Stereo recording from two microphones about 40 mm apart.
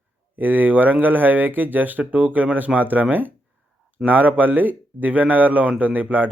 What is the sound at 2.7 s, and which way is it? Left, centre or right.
Speech, right.